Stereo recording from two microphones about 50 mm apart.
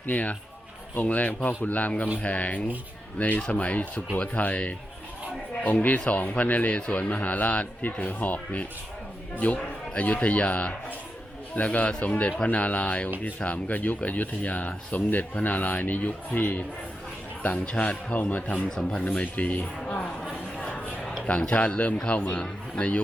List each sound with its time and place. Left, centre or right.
0.0 s speech: left
5.8 s speech: left
10.0 s speech: left
17.7 s speech: left
21.2 s speech: left